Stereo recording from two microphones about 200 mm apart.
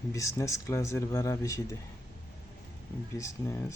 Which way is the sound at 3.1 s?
15° left (ahead or behind).